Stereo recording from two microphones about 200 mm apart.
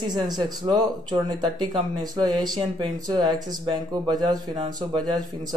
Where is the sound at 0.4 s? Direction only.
20° right (ahead or behind).